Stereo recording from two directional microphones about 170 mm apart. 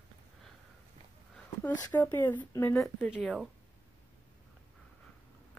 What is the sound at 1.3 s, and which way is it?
Speech, 10° left (ahead or behind).